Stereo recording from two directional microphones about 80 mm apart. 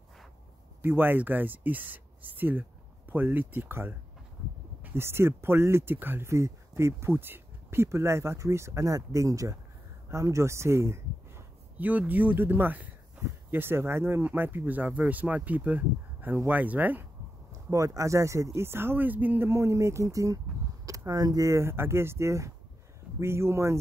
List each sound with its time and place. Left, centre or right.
0.8 s speech: right
11.8 s speech: right
17.6 s speech: right
21.5 s speech: right